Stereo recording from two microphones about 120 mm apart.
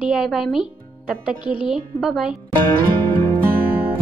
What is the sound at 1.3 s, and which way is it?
Speech, 45° left (ahead or behind).